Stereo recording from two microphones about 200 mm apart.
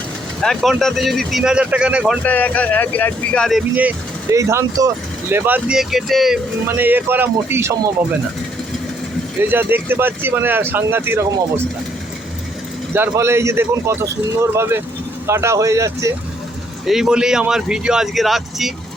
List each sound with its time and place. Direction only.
0.4 s speech: centre (ahead or behind)
2.2 s speech: 10° left (ahead or behind)
3.8 s speech: 10° right (ahead or behind)
9.4 s speech: 10° right (ahead or behind)
12.9 s speech: 10° right (ahead or behind)
16.8 s speech: centre (ahead or behind)